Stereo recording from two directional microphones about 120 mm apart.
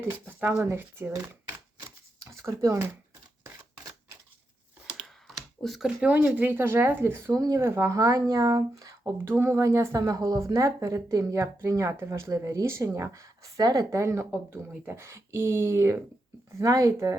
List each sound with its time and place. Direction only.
0.3 s speech: 15° right (ahead or behind)
2.1 s a sound: 25° right (ahead or behind)
4.9 s speech: centre (ahead or behind); by 17.2 s 25° right (ahead or behind)